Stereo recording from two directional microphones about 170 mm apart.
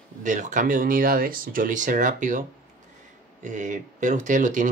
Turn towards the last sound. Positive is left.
turn(degrees=-45)  # may be behind; listen again after turning